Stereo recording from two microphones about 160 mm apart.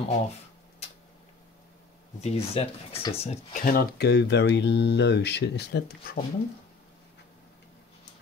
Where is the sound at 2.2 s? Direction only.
40° left (ahead or behind).